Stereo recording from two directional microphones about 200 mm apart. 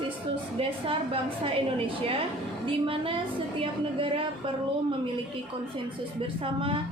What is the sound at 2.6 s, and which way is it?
A woman's voice, 25° right (ahead or behind).